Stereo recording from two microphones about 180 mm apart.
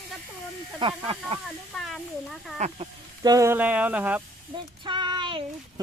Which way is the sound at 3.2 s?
20° right (ahead or behind).